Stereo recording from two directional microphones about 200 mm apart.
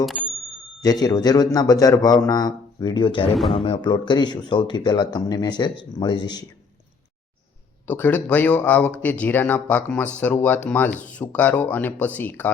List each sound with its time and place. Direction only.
0.0 s bicycle bell: centre (ahead or behind)
0.8 s speech: 20° left (ahead or behind)
3.3 s speech: centre (ahead or behind)
3.6 s speech: 25° left (ahead or behind)
7.9 s speech: 10° left (ahead or behind)